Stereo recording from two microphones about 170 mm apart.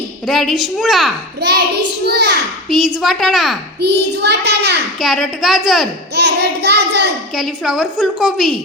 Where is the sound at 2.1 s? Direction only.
80° right.